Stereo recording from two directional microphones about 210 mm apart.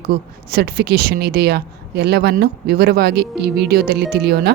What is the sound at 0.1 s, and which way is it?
Speech, 45° right (ahead or behind).